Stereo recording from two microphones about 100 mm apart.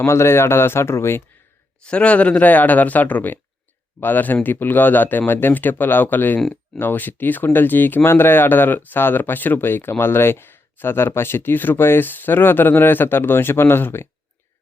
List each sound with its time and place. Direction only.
0.0 s speech: 25° left (ahead or behind)
1.8 s speech: 10° left (ahead or behind)